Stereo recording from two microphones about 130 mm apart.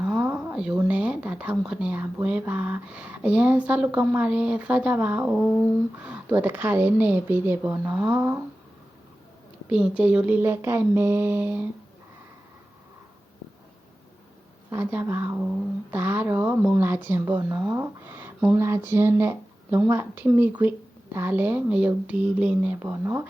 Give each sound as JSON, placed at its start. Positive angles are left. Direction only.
{"t": 0.0, "sound": "a sound", "side_deg": -10}
{"t": 0.9, "sound": "speech", "side_deg": -10}
{"t": 9.6, "sound": "speech", "side_deg": -10}
{"t": 14.7, "sound": "speech", "side_deg": -15}
{"t": 15.4, "sound": "a sound", "side_deg": -5}
{"t": 16.0, "sound": "speech", "side_deg": -15}